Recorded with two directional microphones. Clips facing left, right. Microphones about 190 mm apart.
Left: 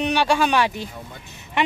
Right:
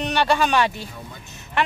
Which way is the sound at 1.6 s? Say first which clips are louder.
Left 2 dB; 20° left (ahead or behind).